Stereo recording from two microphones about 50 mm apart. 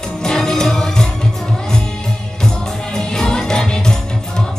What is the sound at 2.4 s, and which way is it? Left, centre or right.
Music, centre.